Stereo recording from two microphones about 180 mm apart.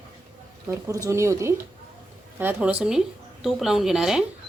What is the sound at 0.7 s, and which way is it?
A woman's voice, 15° right (ahead or behind).